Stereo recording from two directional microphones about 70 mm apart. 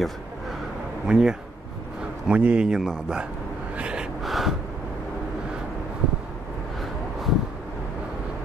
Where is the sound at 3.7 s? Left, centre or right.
Centre.